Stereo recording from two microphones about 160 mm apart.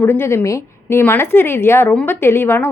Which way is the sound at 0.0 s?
15° left (ahead or behind).